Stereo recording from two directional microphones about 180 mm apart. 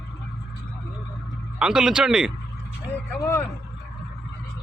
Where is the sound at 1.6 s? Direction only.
5° right (ahead or behind).